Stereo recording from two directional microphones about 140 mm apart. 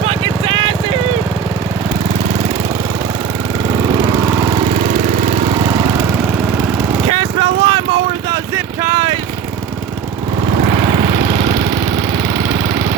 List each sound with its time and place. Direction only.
0.1 s vehicle: 40° right (ahead or behind)
4.9 s lawn mower: 65° right (ahead or behind)
7.1 s vehicle: 40° right (ahead or behind)